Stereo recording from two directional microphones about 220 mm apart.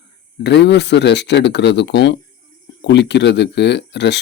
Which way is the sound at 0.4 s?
50° left (ahead or behind).